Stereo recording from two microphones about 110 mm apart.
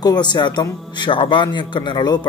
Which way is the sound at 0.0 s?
40° left (ahead or behind).